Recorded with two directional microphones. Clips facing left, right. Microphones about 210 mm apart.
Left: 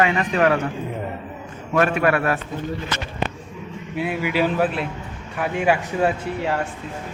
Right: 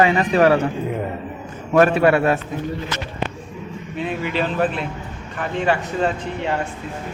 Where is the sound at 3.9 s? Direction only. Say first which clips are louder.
Left 1 dB; 10° left (ahead or behind).